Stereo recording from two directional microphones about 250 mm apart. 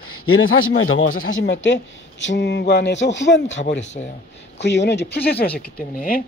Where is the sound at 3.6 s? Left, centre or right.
Left.